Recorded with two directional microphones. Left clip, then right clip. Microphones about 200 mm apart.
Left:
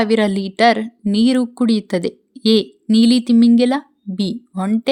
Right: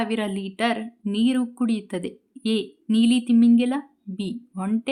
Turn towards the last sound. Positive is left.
turn(degrees=25)  # may be behind; listen again after turning